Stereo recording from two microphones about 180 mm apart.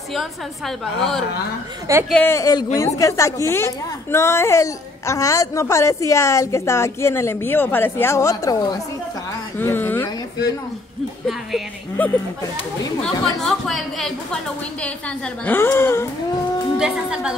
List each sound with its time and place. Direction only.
0.1 s a woman's voice: centre (ahead or behind); by 8.7 s 20° left (ahead or behind)
9.6 s a sound: 10° left (ahead or behind)
12.0 s a woman's voice: 10° left (ahead or behind)
16.7 s a woman's voice: 5° right (ahead or behind)